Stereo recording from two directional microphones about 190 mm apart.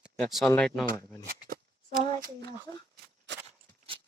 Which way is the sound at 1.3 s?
50° right (ahead or behind).